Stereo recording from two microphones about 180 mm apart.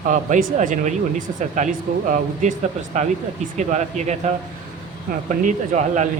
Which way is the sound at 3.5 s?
40° right (ahead or behind).